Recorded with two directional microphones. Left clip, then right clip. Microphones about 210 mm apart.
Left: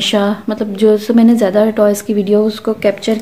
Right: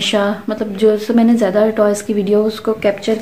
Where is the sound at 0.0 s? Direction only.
25° left (ahead or behind).